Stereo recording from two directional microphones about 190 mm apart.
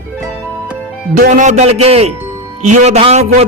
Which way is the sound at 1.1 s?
45° right (ahead or behind).